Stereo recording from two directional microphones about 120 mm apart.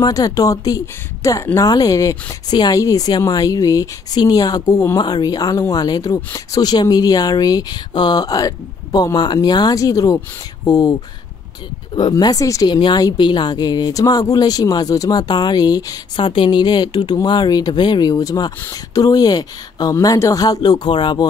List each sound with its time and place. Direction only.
0.0 s speech: 30° left (ahead or behind)